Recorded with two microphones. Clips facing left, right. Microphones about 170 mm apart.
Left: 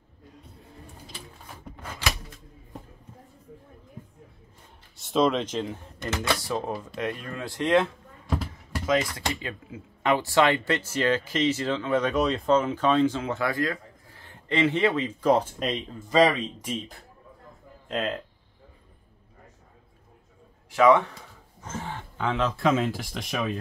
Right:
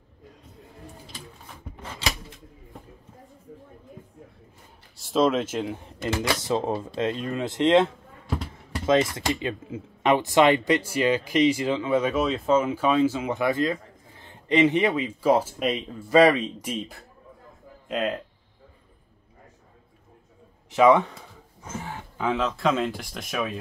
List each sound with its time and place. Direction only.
1.8 s a sound: 20° right (ahead or behind)
4.9 s speech: centre (ahead or behind)
6.4 s speech: 25° right (ahead or behind)
20.7 s speech: 20° right (ahead or behind)
21.9 s speech: 5° right (ahead or behind)